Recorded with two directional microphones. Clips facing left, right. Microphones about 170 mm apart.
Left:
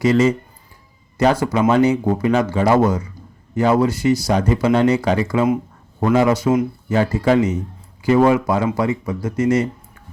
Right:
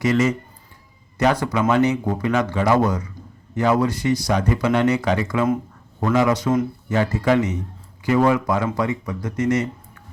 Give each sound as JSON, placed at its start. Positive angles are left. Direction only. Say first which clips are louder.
{"t": 0.0, "sound": "speech", "louder": "left 4 dB", "side_deg": 30}